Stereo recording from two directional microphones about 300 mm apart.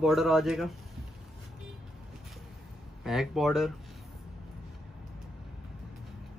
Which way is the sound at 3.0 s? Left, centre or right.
Centre.